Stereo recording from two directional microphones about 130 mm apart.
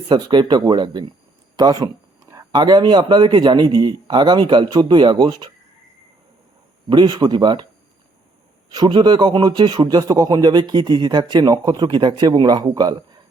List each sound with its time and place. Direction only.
0.1 s speech: 35° right (ahead or behind)
6.9 s speech: 35° right (ahead or behind)
8.7 s speech: 35° right (ahead or behind)